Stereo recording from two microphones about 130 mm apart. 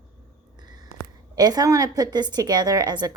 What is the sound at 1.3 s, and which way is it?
A woman's voice, 30° right (ahead or behind).